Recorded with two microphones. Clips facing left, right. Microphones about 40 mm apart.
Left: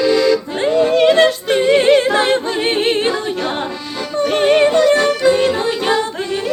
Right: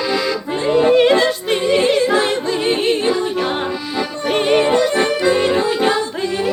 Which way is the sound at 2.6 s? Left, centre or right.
Left.